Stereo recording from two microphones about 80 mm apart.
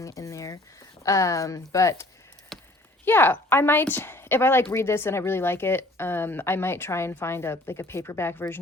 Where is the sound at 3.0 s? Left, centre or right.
Left.